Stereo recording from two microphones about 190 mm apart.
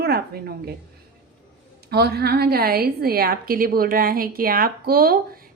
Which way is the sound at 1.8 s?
55° right (ahead or behind).